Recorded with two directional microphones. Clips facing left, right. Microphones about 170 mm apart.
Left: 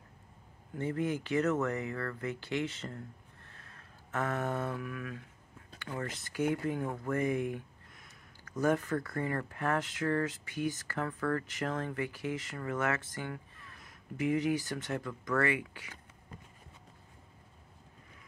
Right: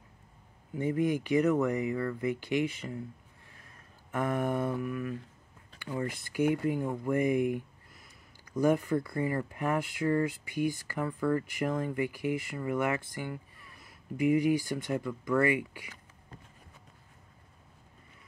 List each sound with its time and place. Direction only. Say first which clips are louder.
0.7 s speech: right 4 dB; 15° right (ahead or behind)
3.4 s a sound: even; 10° right (ahead or behind)
5.8 s speech: right 4 dB; 10° right (ahead or behind)